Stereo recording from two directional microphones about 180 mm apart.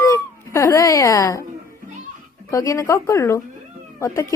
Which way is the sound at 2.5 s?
15° left (ahead or behind).